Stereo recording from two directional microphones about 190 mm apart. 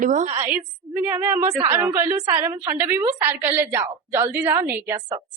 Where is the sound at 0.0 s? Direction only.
40° right (ahead or behind).